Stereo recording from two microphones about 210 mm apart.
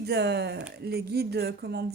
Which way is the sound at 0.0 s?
50° right (ahead or behind).